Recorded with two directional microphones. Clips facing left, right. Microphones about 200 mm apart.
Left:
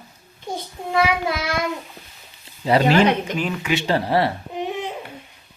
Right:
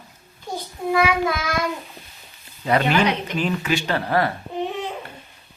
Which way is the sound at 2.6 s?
30° left (ahead or behind).